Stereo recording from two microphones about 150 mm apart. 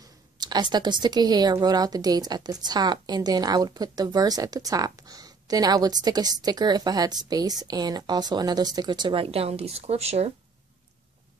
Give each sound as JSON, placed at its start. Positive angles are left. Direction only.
{"t": 0.4, "sound": "a woman's voice", "side_deg": -30}